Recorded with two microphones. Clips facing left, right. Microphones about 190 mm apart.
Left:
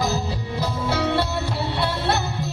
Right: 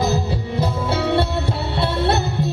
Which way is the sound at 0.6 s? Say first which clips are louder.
Right 2 dB; 25° right (ahead or behind).